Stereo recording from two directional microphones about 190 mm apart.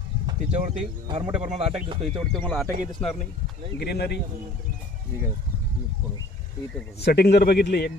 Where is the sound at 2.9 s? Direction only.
30° left (ahead or behind).